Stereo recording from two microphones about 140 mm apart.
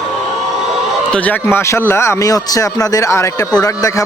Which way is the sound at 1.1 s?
10° left (ahead or behind).